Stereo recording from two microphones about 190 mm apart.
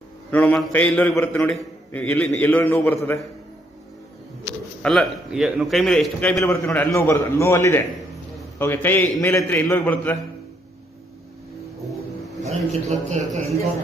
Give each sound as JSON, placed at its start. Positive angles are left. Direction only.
{"t": 0.3, "sound": "a man's voice", "side_deg": 10}
{"t": 4.8, "sound": "a man's voice", "side_deg": 0}
{"t": 12.4, "sound": "a man's voice", "side_deg": -35}